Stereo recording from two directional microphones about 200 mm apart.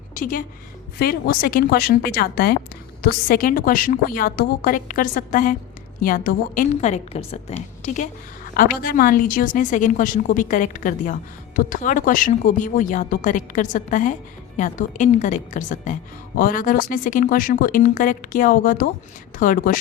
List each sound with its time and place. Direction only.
0.1 s a woman's voice: 40° left (ahead or behind)